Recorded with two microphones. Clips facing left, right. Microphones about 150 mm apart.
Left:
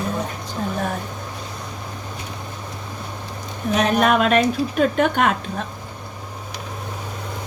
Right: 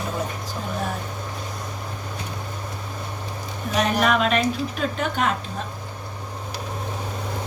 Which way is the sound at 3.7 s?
45° left (ahead or behind).